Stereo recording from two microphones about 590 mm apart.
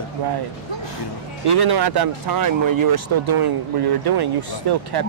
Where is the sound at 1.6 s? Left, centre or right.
Right.